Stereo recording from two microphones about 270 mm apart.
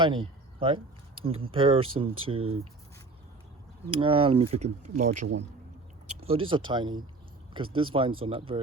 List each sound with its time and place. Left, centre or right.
0.0 s speech: centre
3.8 s speech: centre
6.2 s speech: centre